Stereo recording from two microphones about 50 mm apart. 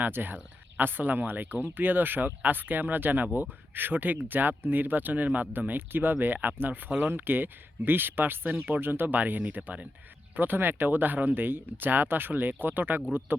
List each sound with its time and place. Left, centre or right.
0.0 s speech: right
10.3 s speech: right